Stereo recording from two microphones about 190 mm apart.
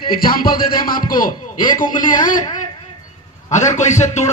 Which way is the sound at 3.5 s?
40° left (ahead or behind).